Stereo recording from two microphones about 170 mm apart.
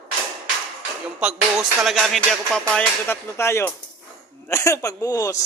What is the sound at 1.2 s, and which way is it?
Speech, 5° right (ahead or behind).